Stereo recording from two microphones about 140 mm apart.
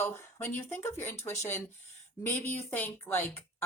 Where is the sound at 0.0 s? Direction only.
15° left (ahead or behind).